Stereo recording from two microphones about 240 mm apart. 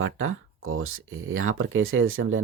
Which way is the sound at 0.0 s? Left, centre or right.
Right.